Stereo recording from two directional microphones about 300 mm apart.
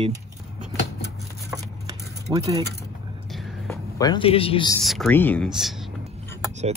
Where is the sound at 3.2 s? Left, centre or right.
Centre.